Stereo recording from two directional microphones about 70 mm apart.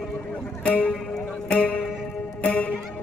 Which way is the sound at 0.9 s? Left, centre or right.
Centre.